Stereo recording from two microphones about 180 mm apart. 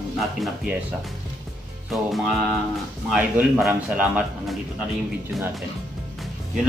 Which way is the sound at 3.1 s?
5° right (ahead or behind).